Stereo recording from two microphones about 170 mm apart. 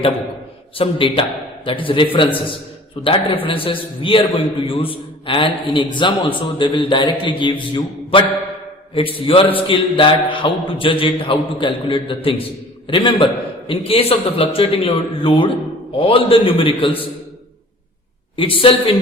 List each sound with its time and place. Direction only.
0.8 s a man's voice: 30° left (ahead or behind)
18.3 s a man's voice: 30° left (ahead or behind)